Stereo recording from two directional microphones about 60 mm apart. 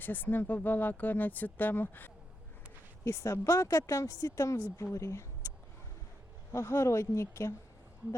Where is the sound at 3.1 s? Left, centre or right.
Left.